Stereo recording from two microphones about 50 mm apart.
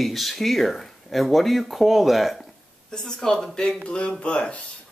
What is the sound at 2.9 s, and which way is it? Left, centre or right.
Speech, centre.